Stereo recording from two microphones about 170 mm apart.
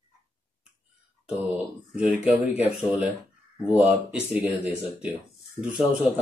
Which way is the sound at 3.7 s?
5° right (ahead or behind).